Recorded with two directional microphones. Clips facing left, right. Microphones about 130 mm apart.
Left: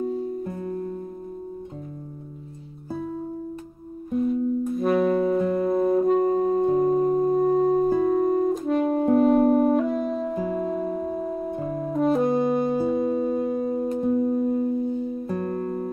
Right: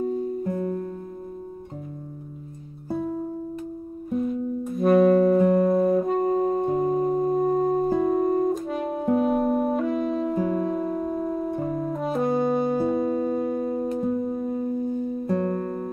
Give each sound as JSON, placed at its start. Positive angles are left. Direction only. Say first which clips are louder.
{"t": 4.1, "sound": "music", "louder": "left 3 dB", "side_deg": 0}
{"t": 5.6, "sound": "brass instrument", "louder": "right 1 dB", "side_deg": 0}
{"t": 11.9, "sound": "saxophone", "louder": "left 6 dB", "side_deg": 0}